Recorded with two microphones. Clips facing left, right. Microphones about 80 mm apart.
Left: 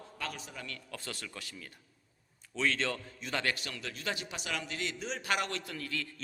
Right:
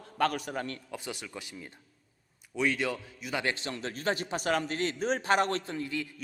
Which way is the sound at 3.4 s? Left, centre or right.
Right.